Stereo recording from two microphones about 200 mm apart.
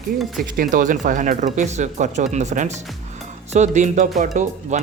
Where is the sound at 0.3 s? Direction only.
40° right (ahead or behind).